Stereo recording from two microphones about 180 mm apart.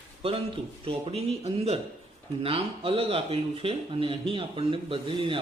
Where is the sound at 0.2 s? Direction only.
30° right (ahead or behind).